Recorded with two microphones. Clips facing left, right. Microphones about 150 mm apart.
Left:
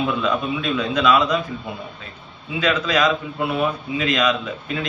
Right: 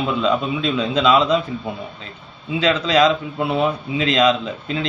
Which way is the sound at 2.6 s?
25° right (ahead or behind).